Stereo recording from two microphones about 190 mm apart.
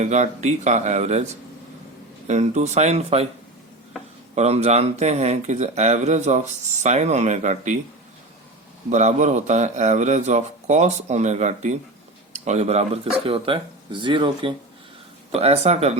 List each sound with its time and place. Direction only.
0.0 s speech: 35° right (ahead or behind)
2.2 s speech: 35° right (ahead or behind)
4.4 s speech: 35° right (ahead or behind)
8.9 s speech: 40° right (ahead or behind)